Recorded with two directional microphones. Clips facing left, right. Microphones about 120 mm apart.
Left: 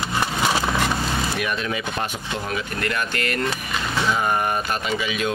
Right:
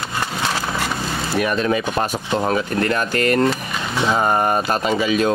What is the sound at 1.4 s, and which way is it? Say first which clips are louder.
Speech: right 7 dB; 40° right (ahead or behind).